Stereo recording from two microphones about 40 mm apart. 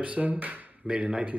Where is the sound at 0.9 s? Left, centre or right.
Centre.